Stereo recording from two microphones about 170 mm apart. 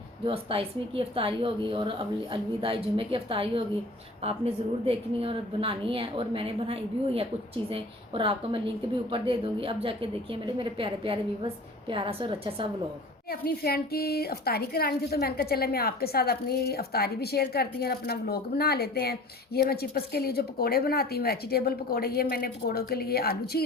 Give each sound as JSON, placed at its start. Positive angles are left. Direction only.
{"t": 0.3, "sound": "a woman's voice", "side_deg": -35}
{"t": 13.3, "sound": "a woman's voice", "side_deg": 65}